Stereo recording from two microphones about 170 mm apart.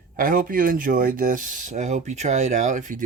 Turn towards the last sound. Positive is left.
turn(degrees=-50)  # may be behind; listen again after turning